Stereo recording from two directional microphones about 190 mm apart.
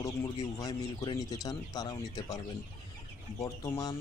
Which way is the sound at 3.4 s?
15° left (ahead or behind).